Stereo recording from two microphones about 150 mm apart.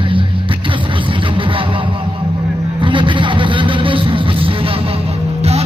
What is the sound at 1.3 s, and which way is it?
Music, 35° right (ahead or behind).